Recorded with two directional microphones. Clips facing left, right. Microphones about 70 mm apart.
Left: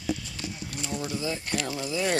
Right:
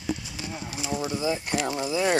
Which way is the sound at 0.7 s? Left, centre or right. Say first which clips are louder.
Right 4 dB; centre.